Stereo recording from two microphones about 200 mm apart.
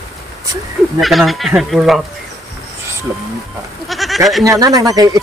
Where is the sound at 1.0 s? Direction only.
Centre (ahead or behind).